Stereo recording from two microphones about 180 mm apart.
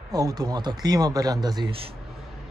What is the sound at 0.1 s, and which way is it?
A man's voice, 20° right (ahead or behind).